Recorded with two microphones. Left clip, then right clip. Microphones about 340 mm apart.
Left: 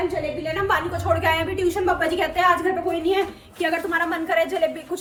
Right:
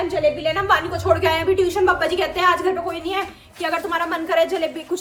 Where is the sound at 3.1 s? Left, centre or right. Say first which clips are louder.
Left 3 dB; centre.